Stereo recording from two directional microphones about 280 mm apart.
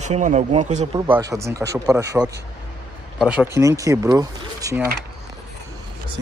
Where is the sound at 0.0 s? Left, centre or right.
Right.